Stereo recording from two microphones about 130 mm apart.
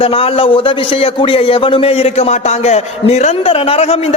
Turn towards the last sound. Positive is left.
turn(degrees=50)  # may be behind; listen again after turning